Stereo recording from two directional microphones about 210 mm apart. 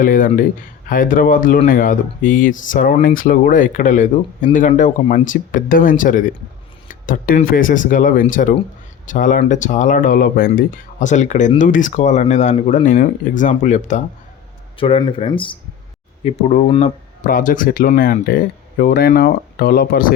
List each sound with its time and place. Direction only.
0.0 s speech: 40° left (ahead or behind)
14.8 s speech: 25° left (ahead or behind)
17.2 s speech: 40° left (ahead or behind)